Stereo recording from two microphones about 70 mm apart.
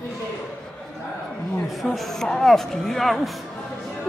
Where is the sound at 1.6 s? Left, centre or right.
Centre.